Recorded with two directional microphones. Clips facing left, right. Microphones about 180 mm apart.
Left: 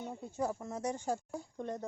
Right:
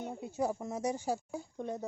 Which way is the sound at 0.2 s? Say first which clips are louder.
Right 3 dB; 10° right (ahead or behind).